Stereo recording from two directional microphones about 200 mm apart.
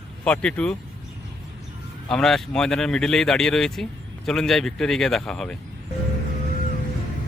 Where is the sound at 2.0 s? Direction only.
5° left (ahead or behind).